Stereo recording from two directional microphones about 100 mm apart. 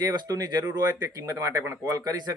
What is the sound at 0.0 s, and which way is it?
Speech, 40° right (ahead or behind).